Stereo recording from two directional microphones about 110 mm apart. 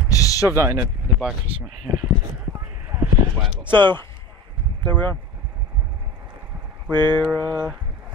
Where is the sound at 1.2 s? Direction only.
15° right (ahead or behind).